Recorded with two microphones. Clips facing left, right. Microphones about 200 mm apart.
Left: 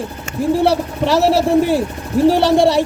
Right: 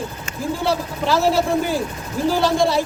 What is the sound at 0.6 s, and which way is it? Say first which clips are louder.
Speech: left 6 dB; 70° left (ahead or behind).